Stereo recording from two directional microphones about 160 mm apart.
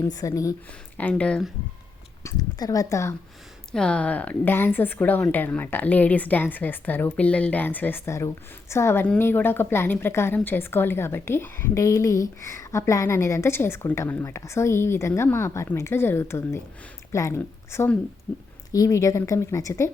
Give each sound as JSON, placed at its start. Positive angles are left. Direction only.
{"t": 0.0, "sound": "a woman's voice", "side_deg": 20}
{"t": 0.9, "sound": "a woman's voice", "side_deg": 10}
{"t": 2.2, "sound": "a woman's voice", "side_deg": 20}
{"t": 3.7, "sound": "a woman's voice", "side_deg": 5}